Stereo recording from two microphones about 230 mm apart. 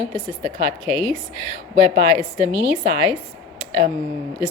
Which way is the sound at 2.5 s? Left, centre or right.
Centre.